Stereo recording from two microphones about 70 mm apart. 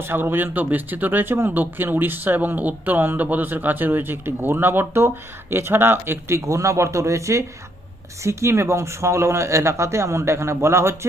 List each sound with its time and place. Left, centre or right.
0.0 s speech: right